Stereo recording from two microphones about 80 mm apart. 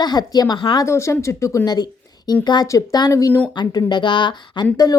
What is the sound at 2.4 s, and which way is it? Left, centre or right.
Speech, left.